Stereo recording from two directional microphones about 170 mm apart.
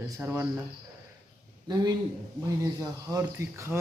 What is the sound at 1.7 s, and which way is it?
A man's voice, 20° right (ahead or behind).